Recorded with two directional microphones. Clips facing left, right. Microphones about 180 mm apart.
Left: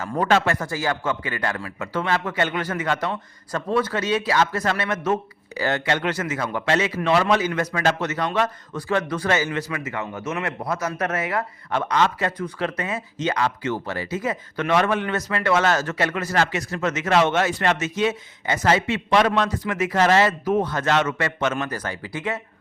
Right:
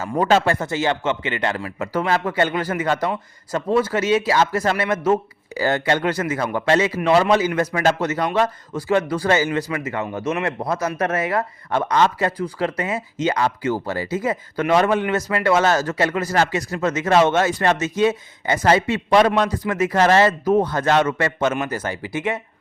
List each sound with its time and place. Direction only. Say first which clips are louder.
0.0 s speech: right 3 dB; 25° right (ahead or behind)
10.6 s speech: right 3 dB; 35° right (ahead or behind)
16.3 s speech: right 3 dB; 40° right (ahead or behind); by 22.4 s 25° right (ahead or behind)